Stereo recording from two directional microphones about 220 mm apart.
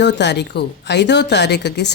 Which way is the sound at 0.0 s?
50° left (ahead or behind).